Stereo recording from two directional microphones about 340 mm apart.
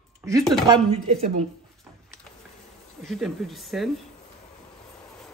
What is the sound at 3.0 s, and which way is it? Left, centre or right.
Speech, centre.